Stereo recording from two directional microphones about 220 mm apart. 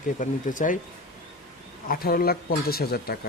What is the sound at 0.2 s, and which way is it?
Speech, 35° left (ahead or behind).